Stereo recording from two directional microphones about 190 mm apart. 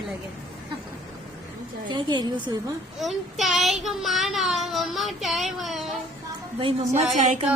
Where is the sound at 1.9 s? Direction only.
25° right (ahead or behind).